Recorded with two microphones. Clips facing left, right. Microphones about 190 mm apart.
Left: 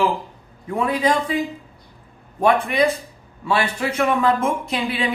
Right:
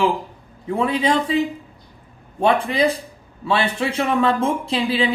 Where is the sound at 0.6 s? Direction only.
25° right (ahead or behind).